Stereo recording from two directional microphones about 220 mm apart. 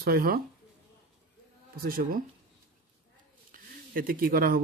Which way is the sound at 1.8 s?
40° right (ahead or behind).